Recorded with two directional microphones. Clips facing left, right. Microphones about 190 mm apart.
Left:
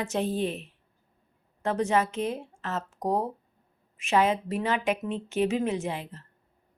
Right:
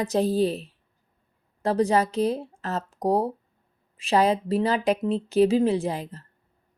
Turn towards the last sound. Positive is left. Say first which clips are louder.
# right 5 dB
turn(degrees=-40)  # may be behind; listen again after turning